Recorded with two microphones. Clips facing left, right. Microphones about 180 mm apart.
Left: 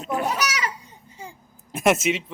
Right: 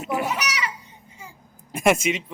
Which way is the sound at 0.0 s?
5° right (ahead or behind).